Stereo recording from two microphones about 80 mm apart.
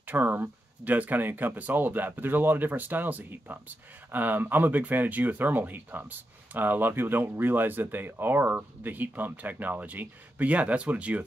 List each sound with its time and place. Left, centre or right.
0.1 s speech: right